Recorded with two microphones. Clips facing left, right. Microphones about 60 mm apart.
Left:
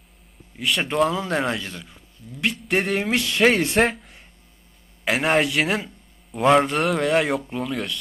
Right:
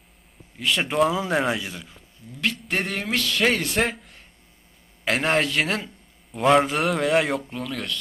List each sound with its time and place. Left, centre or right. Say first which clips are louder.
0.5 s a man's voice: even; centre
3.2 s speech: left 1 dB; left
3.8 s a man's voice: left 4 dB; centre